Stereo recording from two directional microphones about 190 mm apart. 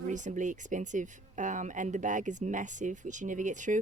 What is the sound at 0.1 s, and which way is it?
Speech, 40° right (ahead or behind).